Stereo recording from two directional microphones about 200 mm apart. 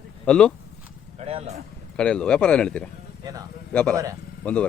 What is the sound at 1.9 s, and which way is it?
Speech, 5° left (ahead or behind).